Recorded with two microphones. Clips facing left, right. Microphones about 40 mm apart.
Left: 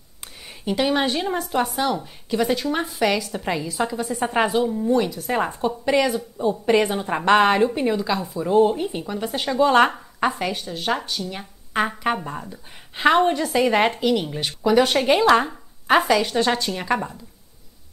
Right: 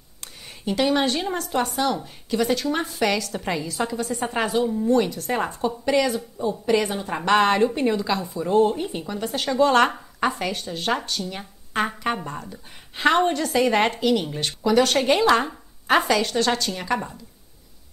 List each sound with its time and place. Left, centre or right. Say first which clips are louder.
0.7 s a woman's voice: even; centre
4.6 s a woman's voice: even; centre
6.6 s a woman's voice: left 2 dB; left; by 16.3 s centre
16.3 s a woman's voice: left 1 dB; centre